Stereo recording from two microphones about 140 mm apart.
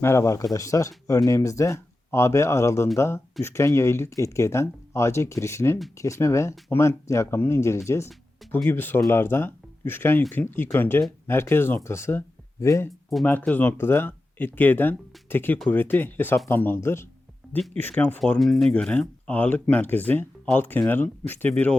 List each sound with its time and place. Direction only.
0.0 s speech: 20° left (ahead or behind)
18.2 s speech: centre (ahead or behind)